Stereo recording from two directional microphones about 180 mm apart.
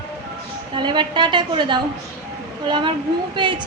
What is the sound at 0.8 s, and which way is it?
A woman's voice, 25° right (ahead or behind).